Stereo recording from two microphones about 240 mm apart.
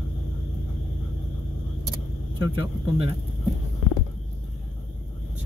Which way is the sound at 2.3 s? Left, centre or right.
Centre.